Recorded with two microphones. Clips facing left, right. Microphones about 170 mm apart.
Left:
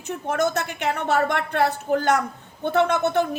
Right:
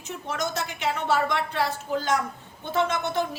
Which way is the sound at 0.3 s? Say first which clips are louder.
Left 7 dB; 55° left (ahead or behind).